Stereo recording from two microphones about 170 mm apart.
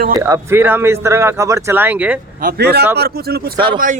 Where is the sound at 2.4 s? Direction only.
70° right (ahead or behind).